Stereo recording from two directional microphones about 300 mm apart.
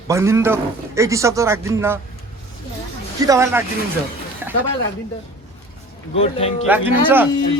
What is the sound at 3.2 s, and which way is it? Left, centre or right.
Speech, centre.